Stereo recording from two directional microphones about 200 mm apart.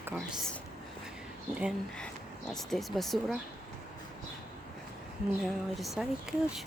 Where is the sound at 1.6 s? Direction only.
5° right (ahead or behind).